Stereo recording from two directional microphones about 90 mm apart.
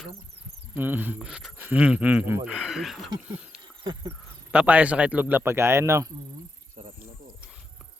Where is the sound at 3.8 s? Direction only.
50° right (ahead or behind).